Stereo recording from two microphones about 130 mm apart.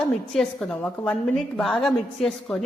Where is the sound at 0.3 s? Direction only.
5° left (ahead or behind).